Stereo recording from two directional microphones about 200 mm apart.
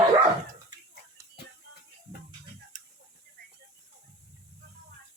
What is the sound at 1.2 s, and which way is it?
Music, 15° right (ahead or behind).